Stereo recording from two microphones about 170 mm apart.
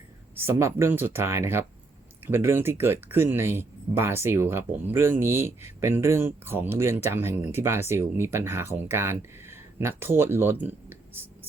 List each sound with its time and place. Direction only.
0.3 s speech: 15° right (ahead or behind)